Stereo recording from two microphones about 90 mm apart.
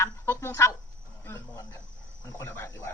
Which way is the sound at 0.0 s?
30° left (ahead or behind).